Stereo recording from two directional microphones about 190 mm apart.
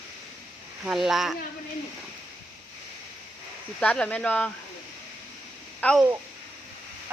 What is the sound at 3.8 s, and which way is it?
Speech, 5° left (ahead or behind).